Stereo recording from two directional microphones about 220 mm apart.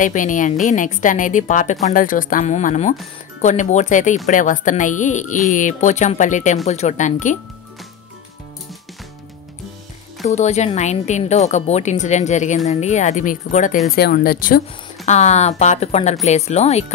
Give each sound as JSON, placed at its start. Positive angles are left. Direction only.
{"t": 0.0, "sound": "a woman's voice", "side_deg": 35}
{"t": 10.2, "sound": "a woman's voice", "side_deg": 30}
{"t": 15.0, "sound": "a woman's voice", "side_deg": 30}